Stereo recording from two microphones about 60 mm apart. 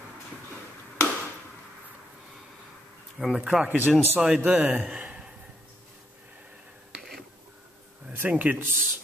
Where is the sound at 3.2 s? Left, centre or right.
Centre.